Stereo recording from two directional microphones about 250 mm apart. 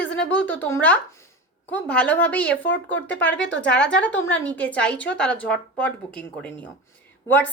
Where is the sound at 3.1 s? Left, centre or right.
Centre.